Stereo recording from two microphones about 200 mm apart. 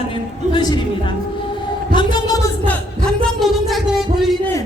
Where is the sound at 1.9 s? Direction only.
25° left (ahead or behind).